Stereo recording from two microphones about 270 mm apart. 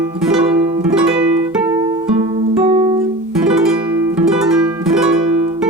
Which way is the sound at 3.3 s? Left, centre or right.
Centre.